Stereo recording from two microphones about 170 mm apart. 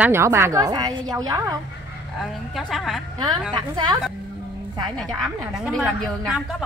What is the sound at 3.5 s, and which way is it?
Speech, 25° right (ahead or behind).